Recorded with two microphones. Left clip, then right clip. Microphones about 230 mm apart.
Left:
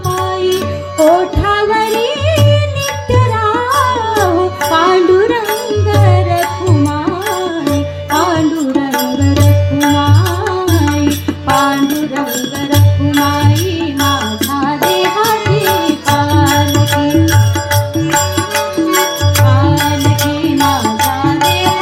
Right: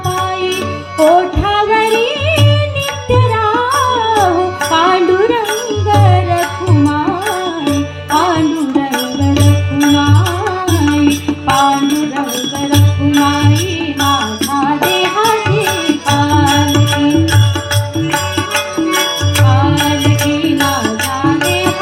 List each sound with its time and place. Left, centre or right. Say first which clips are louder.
0.9 s music: even; left
14.6 s music: even; left